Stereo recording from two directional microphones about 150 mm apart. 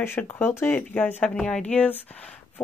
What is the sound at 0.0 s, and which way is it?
Speech, 15° left (ahead or behind).